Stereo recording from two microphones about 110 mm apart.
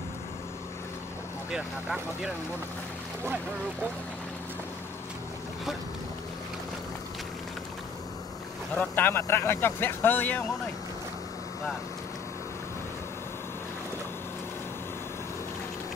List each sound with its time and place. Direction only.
1.5 s speech: 10° right (ahead or behind)
8.7 s speech: 20° left (ahead or behind)